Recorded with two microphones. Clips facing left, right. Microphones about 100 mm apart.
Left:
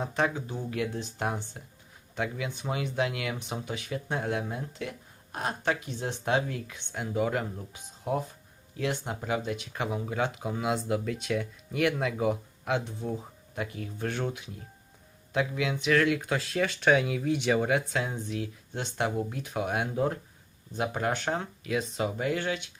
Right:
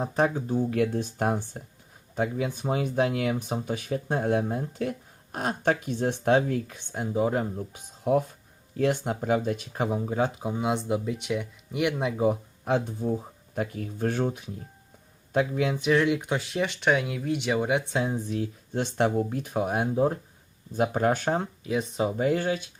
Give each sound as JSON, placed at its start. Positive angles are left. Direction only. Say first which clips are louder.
{"t": 0.0, "sound": "speech", "louder": "right 4 dB", "side_deg": -35}
{"t": 0.7, "sound": "speech", "louder": "right 3 dB", "side_deg": -50}
{"t": 2.1, "sound": "speech", "louder": "right 5 dB", "side_deg": -35}
{"t": 6.9, "sound": "speech", "louder": "right 3 dB", "side_deg": -30}
{"t": 7.7, "sound": "speech", "louder": "right 8 dB", "side_deg": -55}
{"t": 13.6, "sound": "speech", "louder": "right 5 dB", "side_deg": -45}
{"t": 15.8, "sound": "speech", "louder": "right 1 dB", "side_deg": -25}
{"t": 16.8, "sound": "speech", "louder": "left 2 dB", "side_deg": 0}
{"t": 18.3, "sound": "speech", "louder": "right 6 dB", "side_deg": -40}
{"t": 20.7, "sound": "speech", "louder": "right 6 dB", "side_deg": -45}